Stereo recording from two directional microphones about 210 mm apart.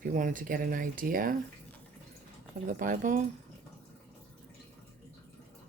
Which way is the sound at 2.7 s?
40° right (ahead or behind).